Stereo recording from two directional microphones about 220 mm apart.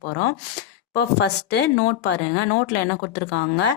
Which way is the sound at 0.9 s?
50° left (ahead or behind).